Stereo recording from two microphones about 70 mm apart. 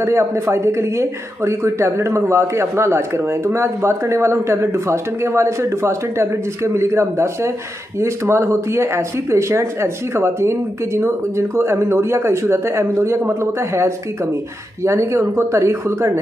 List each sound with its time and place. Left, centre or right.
0.0 s speech: right